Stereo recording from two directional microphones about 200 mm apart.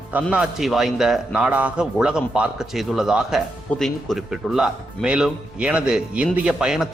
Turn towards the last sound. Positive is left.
turn(degrees=-5)  # may be behind; listen again after turning